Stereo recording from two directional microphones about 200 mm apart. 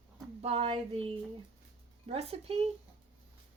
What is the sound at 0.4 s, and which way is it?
Speech, 30° right (ahead or behind).